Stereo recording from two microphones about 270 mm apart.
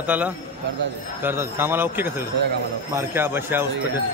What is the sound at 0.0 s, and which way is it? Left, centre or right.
A man's voice, centre.